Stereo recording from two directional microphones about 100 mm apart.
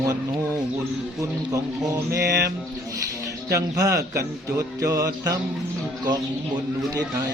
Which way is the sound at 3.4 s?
30° right (ahead or behind).